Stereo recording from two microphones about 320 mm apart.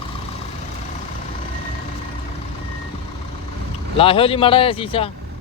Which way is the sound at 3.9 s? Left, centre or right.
Centre.